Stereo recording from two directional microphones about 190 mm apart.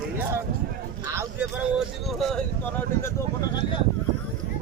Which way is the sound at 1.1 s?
15° right (ahead or behind).